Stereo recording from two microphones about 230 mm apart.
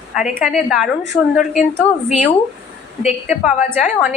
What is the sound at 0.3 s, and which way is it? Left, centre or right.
Speech, centre.